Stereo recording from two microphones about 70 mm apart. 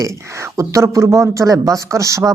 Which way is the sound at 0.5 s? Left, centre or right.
Right.